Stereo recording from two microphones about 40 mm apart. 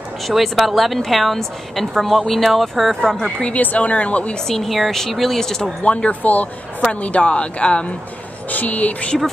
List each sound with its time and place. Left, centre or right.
0.3 s a woman's voice: centre
3.5 s speech: left
4.5 s speech: centre
5.9 s speech: left
6.2 s speech: left
8.5 s speech: left